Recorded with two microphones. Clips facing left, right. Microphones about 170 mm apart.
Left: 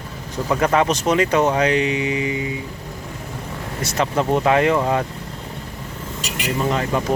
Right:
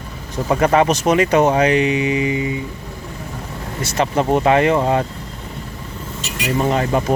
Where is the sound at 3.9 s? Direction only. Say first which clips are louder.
Right 2 dB; 25° right (ahead or behind).